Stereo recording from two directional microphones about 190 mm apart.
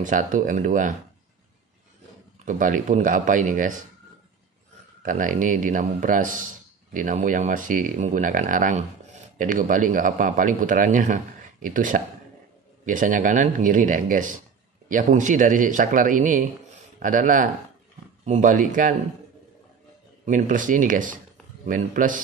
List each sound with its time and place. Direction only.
0.0 s a man's voice: 45° right (ahead or behind)
2.4 s a man's voice: 40° right (ahead or behind)
5.0 s a man's voice: 45° right (ahead or behind)
20.2 s a man's voice: 40° right (ahead or behind)